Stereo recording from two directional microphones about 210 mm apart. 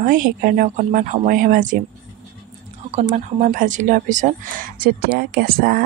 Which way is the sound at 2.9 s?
35° right (ahead or behind).